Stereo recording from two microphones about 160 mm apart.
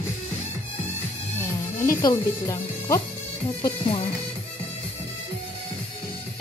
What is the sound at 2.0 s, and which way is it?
Speech, 20° left (ahead or behind).